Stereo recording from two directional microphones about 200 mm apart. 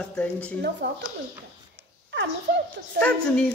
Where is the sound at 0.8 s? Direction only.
55° right (ahead or behind).